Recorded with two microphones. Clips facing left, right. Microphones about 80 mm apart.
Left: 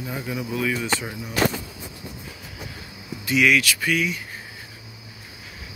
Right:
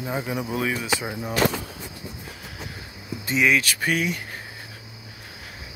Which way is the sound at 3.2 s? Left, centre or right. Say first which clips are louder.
Left 2 dB; right.